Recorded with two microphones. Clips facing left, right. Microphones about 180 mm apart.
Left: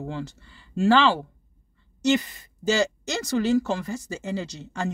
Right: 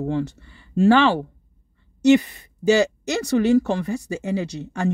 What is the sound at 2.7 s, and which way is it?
Speech, 65° right (ahead or behind).